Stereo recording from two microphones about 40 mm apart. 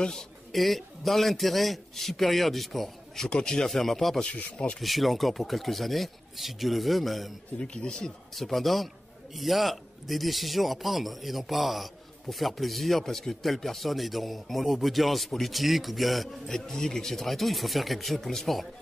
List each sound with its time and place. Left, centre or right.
0.1 s a man's voice: centre
3.3 s speech: left
3.6 s a man's voice: centre
7.6 s speech: left
8.4 s a man's voice: centre
16.4 s a man's voice: centre